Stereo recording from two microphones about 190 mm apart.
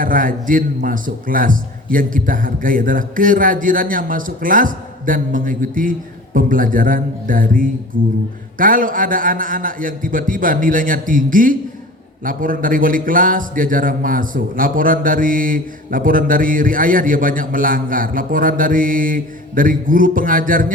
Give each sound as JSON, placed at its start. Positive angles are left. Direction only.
{"t": 0.0, "sound": "a man's voice", "side_deg": -45}